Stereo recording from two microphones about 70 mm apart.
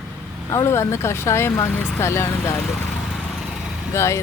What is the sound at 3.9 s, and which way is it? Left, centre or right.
Speech, left.